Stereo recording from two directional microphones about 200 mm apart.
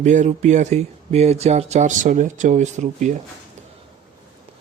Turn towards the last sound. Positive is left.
turn(degrees=-35)  # may be behind; listen again after turning